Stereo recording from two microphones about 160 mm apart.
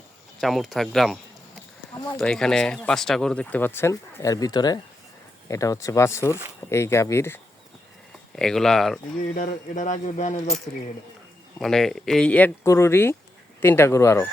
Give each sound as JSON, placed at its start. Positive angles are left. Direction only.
{"t": 0.3, "sound": "speech", "side_deg": 0}
{"t": 8.4, "sound": "speech", "side_deg": 5}
{"t": 9.2, "sound": "speech", "side_deg": 55}
{"t": 11.6, "sound": "speech", "side_deg": 0}
{"t": 12.6, "sound": "speech", "side_deg": 15}